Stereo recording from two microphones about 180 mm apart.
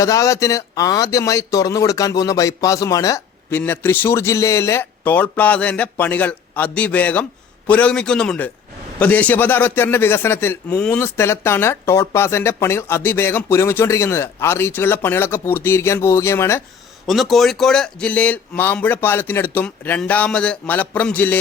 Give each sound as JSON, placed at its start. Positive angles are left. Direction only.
{"t": 0.0, "sound": "a man's voice", "side_deg": 15}
{"t": 17.1, "sound": "a man's voice", "side_deg": 0}